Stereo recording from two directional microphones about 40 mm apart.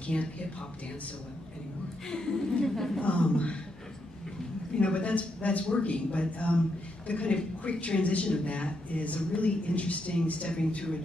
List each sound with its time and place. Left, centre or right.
0.0 s speech: left
2.0 s a woman's voice: centre
3.0 s speech: left
4.7 s speech: left